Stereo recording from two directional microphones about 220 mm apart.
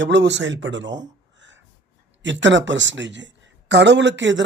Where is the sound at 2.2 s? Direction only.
55° right (ahead or behind).